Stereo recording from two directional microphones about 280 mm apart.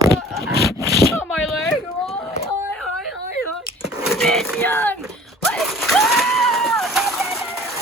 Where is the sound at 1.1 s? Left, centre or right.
Centre.